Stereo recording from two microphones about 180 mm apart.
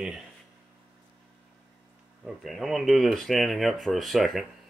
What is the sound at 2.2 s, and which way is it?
Speech, centre (ahead or behind).